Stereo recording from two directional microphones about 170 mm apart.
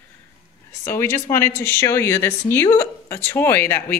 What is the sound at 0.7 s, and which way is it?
Speech, 15° left (ahead or behind).